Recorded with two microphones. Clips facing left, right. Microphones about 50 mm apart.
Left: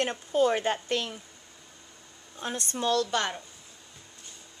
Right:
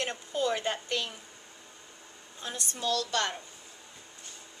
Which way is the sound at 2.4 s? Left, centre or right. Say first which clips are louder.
Left 5 dB; left.